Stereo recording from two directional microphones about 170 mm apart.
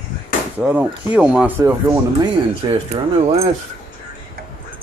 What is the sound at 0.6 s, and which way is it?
Speech, 10° right (ahead or behind).